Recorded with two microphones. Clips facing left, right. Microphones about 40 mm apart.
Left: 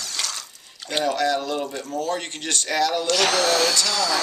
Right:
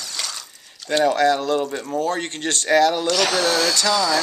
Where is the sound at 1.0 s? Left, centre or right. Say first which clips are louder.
Right 5 dB; right.